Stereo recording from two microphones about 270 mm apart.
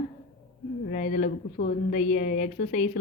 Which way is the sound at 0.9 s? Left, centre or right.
Left.